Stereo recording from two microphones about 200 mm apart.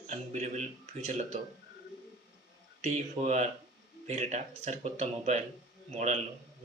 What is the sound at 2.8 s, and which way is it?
A man's voice, 35° right (ahead or behind).